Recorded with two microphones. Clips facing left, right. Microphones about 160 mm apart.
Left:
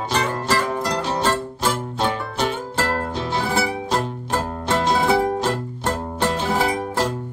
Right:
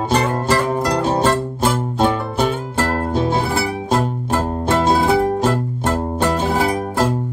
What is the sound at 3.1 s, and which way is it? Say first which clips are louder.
Music: right 7 dB; 50° right (ahead or behind).